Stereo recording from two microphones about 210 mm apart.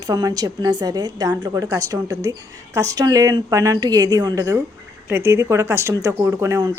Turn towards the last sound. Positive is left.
turn(degrees=-15)  # may be behind; listen again after turning